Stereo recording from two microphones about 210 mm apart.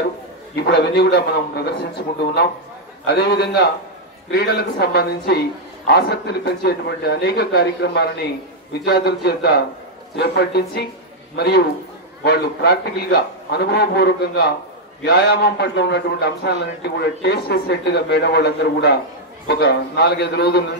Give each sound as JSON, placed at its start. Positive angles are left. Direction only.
{"t": 0.6, "sound": "a man's voice", "side_deg": 50}